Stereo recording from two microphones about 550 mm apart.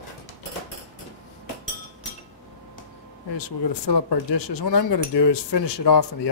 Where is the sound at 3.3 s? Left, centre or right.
Left.